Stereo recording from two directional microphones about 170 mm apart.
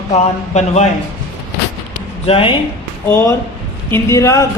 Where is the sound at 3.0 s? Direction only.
10° left (ahead or behind).